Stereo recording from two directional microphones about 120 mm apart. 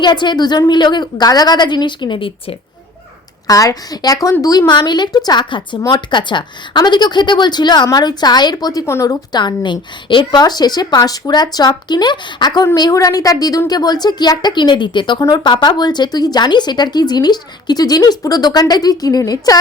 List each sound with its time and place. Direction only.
0.0 s speech: 40° left (ahead or behind)
3.4 s speech: 30° left (ahead or behind)
8.9 s speech: 25° left (ahead or behind)
9.3 s speech: 35° left (ahead or behind)